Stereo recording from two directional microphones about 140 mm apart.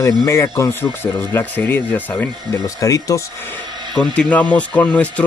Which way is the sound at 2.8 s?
25° left (ahead or behind).